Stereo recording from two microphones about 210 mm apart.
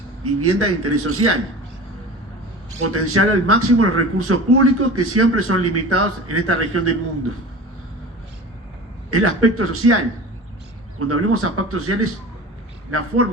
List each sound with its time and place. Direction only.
0.2 s a man's voice: 90° right
2.8 s a man's voice: 90° right
9.0 s a man's voice: 90° right
11.0 s a man's voice: 90° right